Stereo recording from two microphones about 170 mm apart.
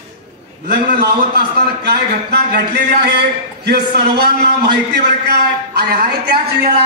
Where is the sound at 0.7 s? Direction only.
70° right (ahead or behind).